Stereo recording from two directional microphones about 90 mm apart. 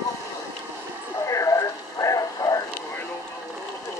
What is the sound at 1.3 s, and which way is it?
Radio, 35° left (ahead or behind).